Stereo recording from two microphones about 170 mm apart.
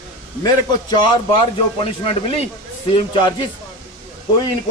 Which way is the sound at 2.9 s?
30° left (ahead or behind).